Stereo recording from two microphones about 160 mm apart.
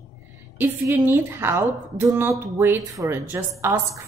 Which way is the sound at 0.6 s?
15° right (ahead or behind).